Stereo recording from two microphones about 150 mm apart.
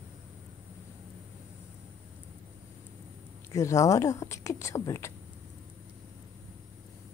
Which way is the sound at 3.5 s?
20° left (ahead or behind).